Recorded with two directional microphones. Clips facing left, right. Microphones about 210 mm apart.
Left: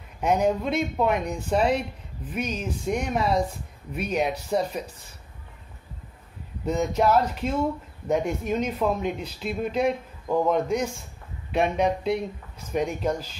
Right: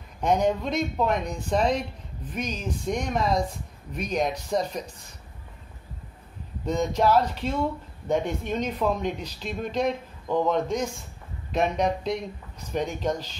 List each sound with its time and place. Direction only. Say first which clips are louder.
0.2 s speech: left 1 dB; 5° left (ahead or behind)
6.6 s speech: left 1 dB; 5° left (ahead or behind)